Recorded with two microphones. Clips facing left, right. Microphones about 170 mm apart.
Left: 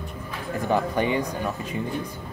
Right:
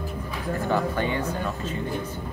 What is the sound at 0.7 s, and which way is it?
Speech, 15° left (ahead or behind).